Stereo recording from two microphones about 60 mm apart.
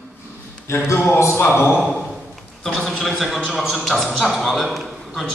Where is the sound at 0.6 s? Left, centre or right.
Left.